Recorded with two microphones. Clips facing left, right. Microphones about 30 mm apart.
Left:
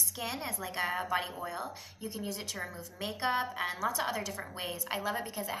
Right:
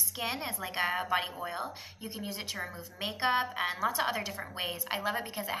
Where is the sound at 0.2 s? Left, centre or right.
Right.